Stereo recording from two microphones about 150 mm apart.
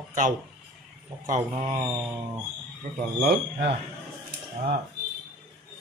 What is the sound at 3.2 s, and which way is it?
Speech, 90° right.